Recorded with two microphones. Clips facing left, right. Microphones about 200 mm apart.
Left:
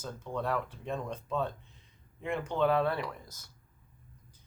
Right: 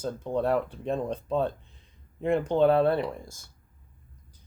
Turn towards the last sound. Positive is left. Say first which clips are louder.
# right 7 dB
turn(degrees=-25)  # may be behind; listen again after turning